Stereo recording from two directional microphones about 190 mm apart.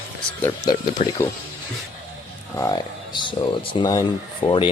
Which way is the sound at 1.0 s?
35° left (ahead or behind).